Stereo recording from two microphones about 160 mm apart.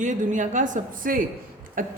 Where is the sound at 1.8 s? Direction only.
60° right (ahead or behind).